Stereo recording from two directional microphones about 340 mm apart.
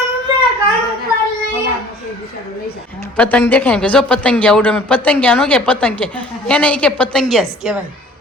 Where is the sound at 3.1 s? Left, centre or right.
Centre.